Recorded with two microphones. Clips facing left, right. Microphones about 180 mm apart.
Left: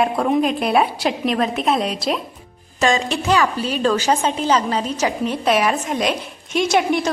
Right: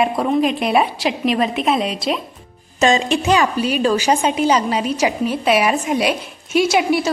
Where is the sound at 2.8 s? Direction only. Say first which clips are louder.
Right 3 dB; 20° right (ahead or behind).